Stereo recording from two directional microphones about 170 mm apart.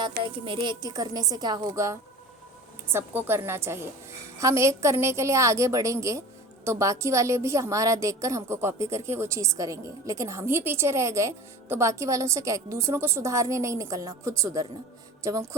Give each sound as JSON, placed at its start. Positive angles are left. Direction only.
{"t": 0.2, "sound": "a woman's voice", "side_deg": -30}